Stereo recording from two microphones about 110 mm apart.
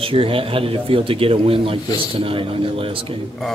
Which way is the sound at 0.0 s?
55° right (ahead or behind).